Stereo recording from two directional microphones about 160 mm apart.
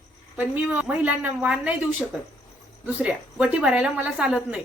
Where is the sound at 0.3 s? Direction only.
10° right (ahead or behind).